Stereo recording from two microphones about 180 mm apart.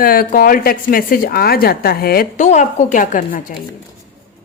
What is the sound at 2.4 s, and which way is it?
A woman's voice, 40° left (ahead or behind).